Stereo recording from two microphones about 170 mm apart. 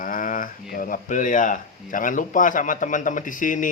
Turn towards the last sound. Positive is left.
turn(degrees=50)  # may be behind; listen again after turning